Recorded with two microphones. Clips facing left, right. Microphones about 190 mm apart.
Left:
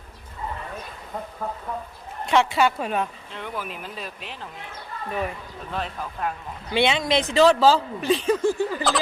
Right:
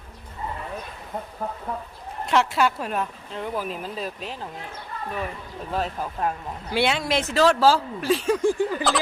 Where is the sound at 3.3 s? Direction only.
35° right (ahead or behind).